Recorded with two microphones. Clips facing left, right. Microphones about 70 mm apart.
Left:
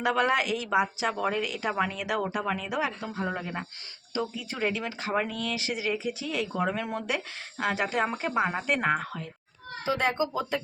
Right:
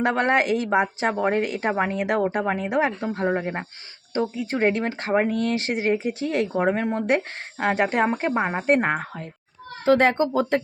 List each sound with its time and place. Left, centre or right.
0.0 s a woman's voice: right
6.6 s a woman's voice: right
7.2 s a woman's voice: right
9.8 s speech: right